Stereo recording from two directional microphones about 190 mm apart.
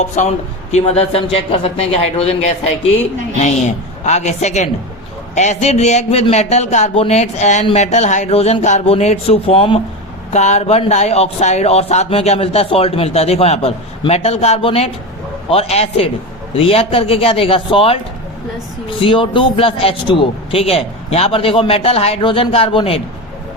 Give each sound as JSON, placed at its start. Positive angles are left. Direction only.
{"t": 0.2, "sound": "speech", "side_deg": 35}
{"t": 4.0, "sound": "speech", "side_deg": 35}